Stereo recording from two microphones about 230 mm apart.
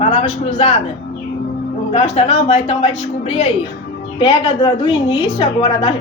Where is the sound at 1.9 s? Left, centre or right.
Left.